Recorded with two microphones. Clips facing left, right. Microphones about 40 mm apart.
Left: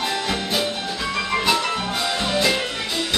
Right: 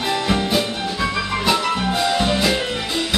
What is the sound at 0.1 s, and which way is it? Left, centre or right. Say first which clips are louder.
Music: right 4 dB; centre.